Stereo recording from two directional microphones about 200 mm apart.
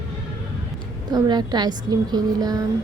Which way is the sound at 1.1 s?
20° right (ahead or behind).